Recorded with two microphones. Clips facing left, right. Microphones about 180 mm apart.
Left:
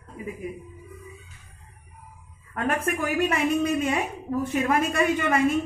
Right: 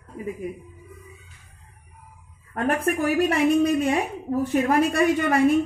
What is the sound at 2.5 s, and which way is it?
A woman's voice, 35° right (ahead or behind).